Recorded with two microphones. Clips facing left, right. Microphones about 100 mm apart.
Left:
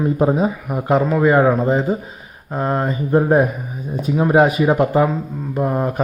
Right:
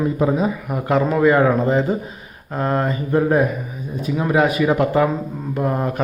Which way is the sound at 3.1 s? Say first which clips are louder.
Left 2 dB; 30° left (ahead or behind).